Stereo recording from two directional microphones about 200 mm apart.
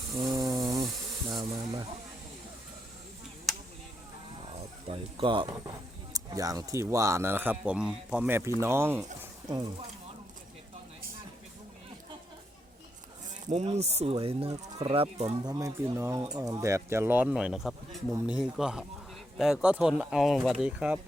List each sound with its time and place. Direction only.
0.2 s a sound: 20° right (ahead or behind)
1.3 s speech: 20° right (ahead or behind)
3.5 s a sound: centre (ahead or behind)
4.9 s speech: 25° right (ahead or behind)
13.5 s speech: 35° right (ahead or behind)
15.4 s speech: 15° right (ahead or behind)